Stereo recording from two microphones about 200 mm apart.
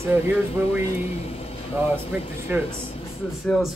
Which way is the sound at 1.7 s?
10° right (ahead or behind).